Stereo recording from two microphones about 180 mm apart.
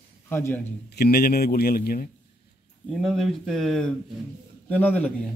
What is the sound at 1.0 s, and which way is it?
Speech, 55° left (ahead or behind).